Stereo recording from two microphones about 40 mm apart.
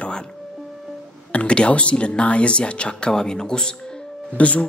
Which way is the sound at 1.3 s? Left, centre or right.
Left.